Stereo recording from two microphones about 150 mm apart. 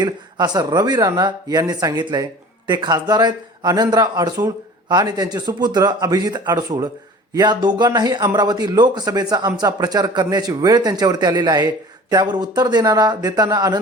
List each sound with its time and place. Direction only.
0.0 s speech: 25° right (ahead or behind)